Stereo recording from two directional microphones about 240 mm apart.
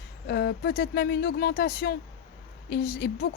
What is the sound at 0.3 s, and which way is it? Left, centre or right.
A woman's voice, left.